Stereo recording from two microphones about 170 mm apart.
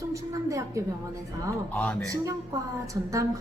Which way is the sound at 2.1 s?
20° right (ahead or behind).